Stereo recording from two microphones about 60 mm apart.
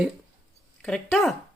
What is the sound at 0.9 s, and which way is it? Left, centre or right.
Speech, centre.